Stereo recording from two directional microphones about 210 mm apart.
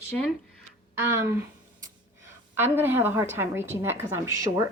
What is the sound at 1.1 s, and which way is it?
Speech, 10° right (ahead or behind).